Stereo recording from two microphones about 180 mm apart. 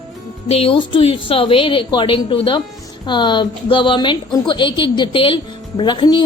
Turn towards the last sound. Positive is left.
turn(degrees=25)  # may be behind; listen again after turning